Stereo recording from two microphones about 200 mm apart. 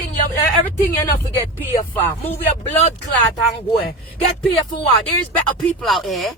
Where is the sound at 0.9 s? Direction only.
20° left (ahead or behind).